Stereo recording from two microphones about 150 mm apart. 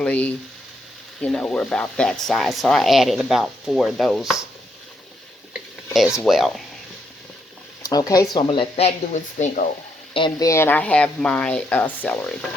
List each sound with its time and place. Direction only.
0.0 s speech: 10° left (ahead or behind)
5.9 s speech: centre (ahead or behind)
7.9 s speech: 25° left (ahead or behind); by 9.6 s 55° left (ahead or behind)
10.2 s speech: 30° left (ahead or behind)
10.5 s speech: 15° left (ahead or behind)